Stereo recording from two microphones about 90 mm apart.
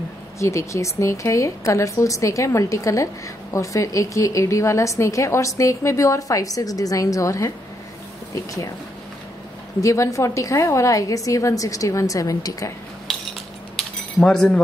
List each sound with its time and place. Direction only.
0.4 s a woman's voice: 35° left (ahead or behind)
9.8 s a woman's voice: 35° left (ahead or behind)
14.2 s speech: 10° left (ahead or behind)